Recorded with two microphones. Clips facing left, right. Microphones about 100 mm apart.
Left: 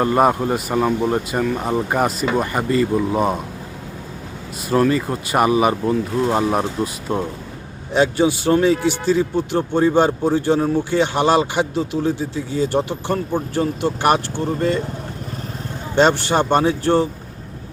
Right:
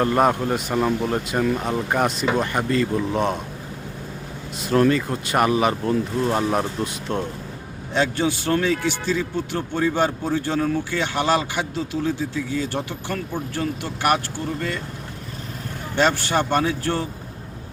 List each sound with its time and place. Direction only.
0.0 s speech: 10° left (ahead or behind)
4.7 s speech: 5° left (ahead or behind); by 14.8 s 25° left (ahead or behind)
16.0 s speech: 20° left (ahead or behind)